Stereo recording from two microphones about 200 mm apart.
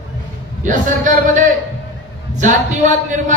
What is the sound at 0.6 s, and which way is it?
A man's voice, 40° right (ahead or behind).